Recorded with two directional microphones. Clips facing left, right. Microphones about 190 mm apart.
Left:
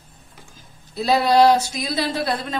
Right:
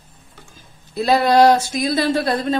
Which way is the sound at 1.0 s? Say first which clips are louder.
Right 2 dB; 50° right (ahead or behind).